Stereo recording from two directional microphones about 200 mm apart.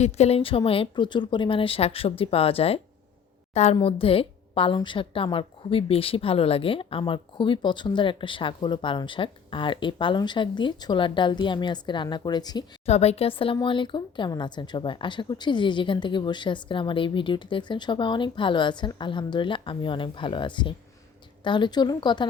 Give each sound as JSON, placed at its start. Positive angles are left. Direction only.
{"t": 0.0, "sound": "a woman's voice", "side_deg": 30}
{"t": 12.8, "sound": "a woman's voice", "side_deg": 30}